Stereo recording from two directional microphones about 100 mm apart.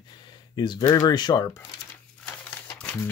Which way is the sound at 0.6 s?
45° left (ahead or behind).